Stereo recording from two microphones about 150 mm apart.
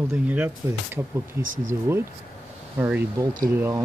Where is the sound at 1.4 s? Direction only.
65° right (ahead or behind).